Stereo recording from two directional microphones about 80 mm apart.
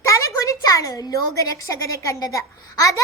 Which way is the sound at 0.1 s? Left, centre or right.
Left.